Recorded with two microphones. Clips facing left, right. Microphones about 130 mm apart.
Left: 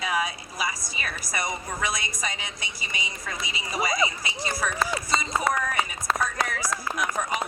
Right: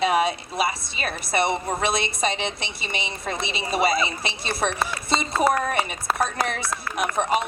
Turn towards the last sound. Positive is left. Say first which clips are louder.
# right 3 dB
turn(degrees=-25)  # may be behind; listen again after turning